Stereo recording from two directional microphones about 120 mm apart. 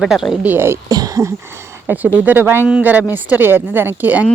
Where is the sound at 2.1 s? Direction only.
15° right (ahead or behind).